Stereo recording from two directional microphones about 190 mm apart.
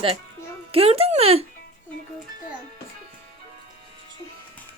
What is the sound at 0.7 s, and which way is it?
Speech, 30° right (ahead or behind).